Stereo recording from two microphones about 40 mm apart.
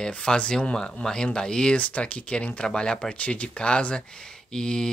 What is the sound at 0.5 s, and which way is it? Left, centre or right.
Speech, left.